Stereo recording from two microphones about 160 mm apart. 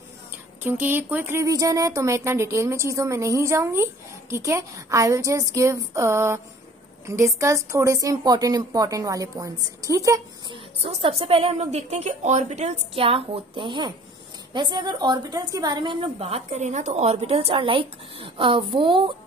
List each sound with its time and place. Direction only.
0.7 s speech: 10° right (ahead or behind)
10.5 s a woman's voice: 35° right (ahead or behind)